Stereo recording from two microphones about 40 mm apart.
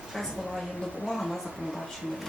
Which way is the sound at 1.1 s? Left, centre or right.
Centre.